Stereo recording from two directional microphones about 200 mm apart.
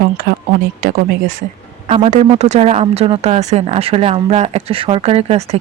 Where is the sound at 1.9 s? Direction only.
30° right (ahead or behind).